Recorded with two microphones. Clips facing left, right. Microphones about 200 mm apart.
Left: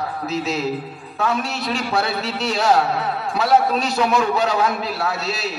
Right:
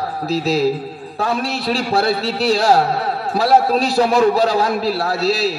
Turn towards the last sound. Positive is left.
turn(degrees=-35)  # may be behind; listen again after turning